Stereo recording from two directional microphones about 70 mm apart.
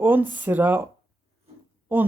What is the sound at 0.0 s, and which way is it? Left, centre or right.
Speech, right.